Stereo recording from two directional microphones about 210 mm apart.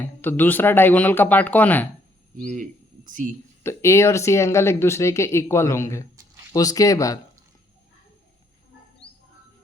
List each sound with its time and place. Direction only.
0.0 s speech: 10° left (ahead or behind)
2.3 s speech: 40° right (ahead or behind)
3.6 s speech: 10° left (ahead or behind)